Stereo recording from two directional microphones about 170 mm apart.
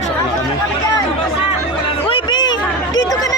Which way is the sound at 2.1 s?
25° left (ahead or behind).